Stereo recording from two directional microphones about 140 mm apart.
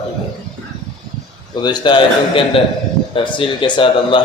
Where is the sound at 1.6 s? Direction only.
30° left (ahead or behind).